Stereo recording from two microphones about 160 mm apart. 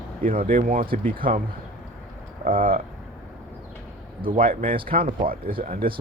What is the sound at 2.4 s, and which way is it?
Speech, 65° right (ahead or behind).